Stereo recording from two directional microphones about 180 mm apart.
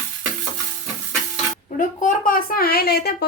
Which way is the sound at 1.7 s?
45° left (ahead or behind).